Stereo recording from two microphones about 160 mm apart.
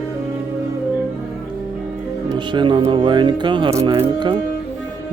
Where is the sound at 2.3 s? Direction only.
30° right (ahead or behind).